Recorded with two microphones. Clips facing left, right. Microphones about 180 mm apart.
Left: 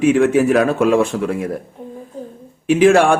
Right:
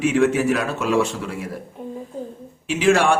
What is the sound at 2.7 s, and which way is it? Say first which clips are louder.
Speech: left 6 dB; 55° left (ahead or behind).